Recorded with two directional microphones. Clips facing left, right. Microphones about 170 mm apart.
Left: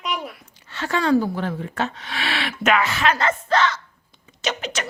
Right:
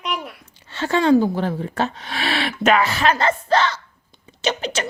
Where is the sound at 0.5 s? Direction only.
30° right (ahead or behind).